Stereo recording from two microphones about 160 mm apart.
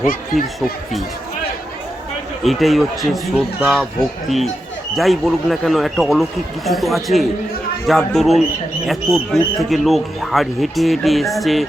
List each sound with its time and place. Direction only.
0.0 s speech: 60° left (ahead or behind)
2.4 s speech: centre (ahead or behind)
4.9 s speech: centre (ahead or behind)